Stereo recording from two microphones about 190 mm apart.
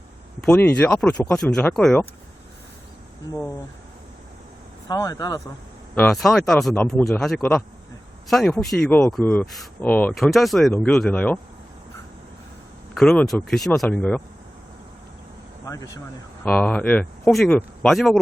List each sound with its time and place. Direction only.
0.4 s speech: 10° left (ahead or behind)
4.9 s speech: 15° left (ahead or behind)
5.9 s speech: 5° left (ahead or behind)
13.0 s speech: 5° left (ahead or behind)
15.6 s speech: 20° left (ahead or behind)
16.4 s speech: 10° left (ahead or behind)